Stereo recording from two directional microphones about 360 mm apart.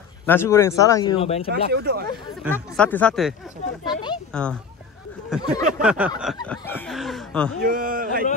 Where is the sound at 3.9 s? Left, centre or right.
Centre.